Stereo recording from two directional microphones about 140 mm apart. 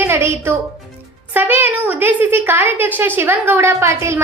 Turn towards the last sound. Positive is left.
turn(degrees=-20)  # may be behind; listen again after turning